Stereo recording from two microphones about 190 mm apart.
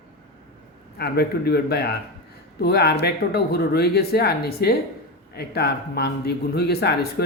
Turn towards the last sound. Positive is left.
turn(degrees=60)  # may be behind; listen again after turning